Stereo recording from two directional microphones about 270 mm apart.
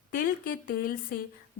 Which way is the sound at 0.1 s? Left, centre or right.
Left.